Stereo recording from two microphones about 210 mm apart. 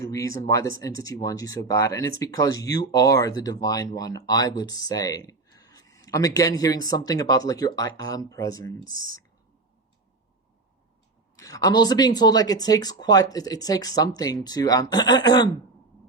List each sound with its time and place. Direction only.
0.0 s speech: 15° left (ahead or behind)
11.3 s speech: 15° left (ahead or behind)